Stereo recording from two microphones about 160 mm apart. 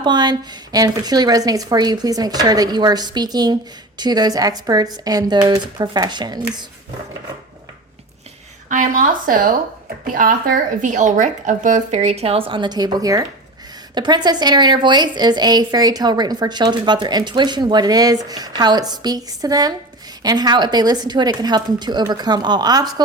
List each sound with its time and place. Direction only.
0.0 s a woman's voice: 25° right (ahead or behind)
8.7 s a woman's voice: 55° right (ahead or behind); by 23.0 s 25° right (ahead or behind)